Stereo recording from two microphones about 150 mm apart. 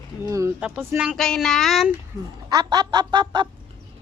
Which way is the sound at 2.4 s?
25° right (ahead or behind).